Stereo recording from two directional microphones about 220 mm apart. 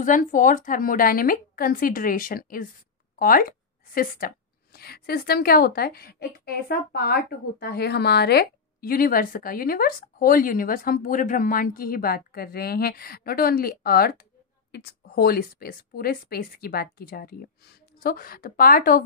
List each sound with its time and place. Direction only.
0.0 s a woman's voice: 35° left (ahead or behind)